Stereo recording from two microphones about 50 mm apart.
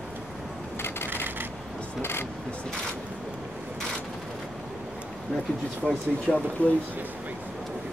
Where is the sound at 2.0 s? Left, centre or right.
Left.